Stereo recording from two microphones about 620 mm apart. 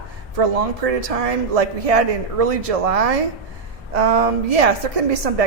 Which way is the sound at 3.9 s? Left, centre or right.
Right.